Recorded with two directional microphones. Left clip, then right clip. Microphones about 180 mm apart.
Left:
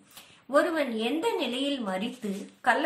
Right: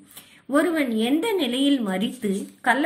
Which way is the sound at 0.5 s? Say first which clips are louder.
Right 3 dB; 25° right (ahead or behind).